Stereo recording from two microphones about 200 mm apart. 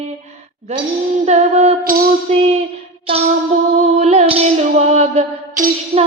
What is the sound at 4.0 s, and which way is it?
Music, 30° right (ahead or behind).